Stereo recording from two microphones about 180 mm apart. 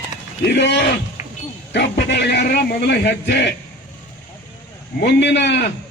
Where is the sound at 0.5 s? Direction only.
70° left (ahead or behind).